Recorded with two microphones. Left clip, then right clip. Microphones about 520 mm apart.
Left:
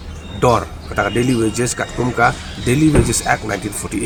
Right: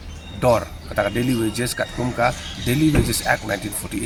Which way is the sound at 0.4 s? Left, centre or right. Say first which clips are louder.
Left 3 dB; right.